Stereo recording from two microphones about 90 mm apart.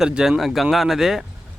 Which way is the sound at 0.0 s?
5° right (ahead or behind).